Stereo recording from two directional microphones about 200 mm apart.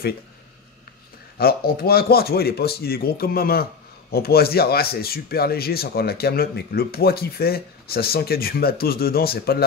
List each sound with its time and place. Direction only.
1.4 s speech: 50° left (ahead or behind)